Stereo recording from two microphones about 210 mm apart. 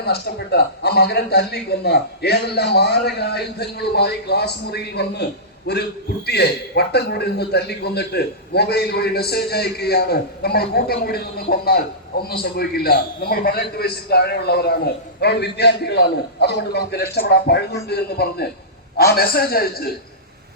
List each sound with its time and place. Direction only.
0.0 s a man's voice: 50° left (ahead or behind)